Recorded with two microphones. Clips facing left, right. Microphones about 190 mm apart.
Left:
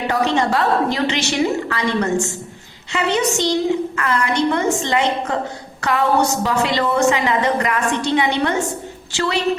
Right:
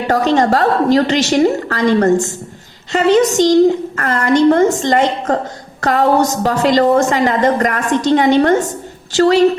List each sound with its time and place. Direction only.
0.1 s a woman's voice: 45° right (ahead or behind)